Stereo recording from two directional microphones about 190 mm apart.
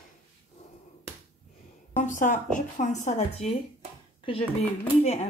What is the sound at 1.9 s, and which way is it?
A woman's voice, 40° left (ahead or behind).